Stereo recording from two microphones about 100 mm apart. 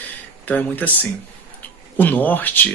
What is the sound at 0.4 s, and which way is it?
Speech, 15° left (ahead or behind).